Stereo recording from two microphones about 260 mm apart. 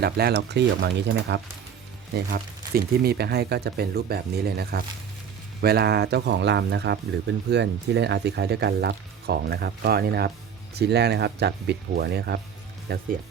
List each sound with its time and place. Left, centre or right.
0.0 s speech: right